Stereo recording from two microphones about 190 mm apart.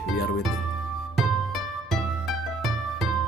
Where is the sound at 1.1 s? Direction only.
Centre (ahead or behind).